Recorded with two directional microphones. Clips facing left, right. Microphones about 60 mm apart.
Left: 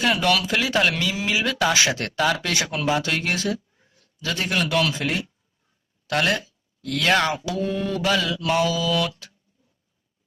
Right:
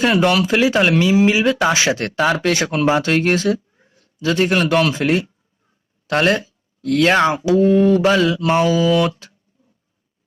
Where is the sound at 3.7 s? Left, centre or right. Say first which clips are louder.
Right 5 dB; right.